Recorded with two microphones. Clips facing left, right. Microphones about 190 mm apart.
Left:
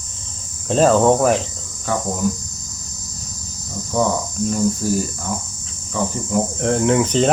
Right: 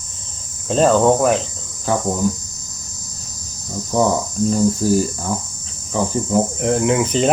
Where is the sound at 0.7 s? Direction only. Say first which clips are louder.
Even; centre (ahead or behind).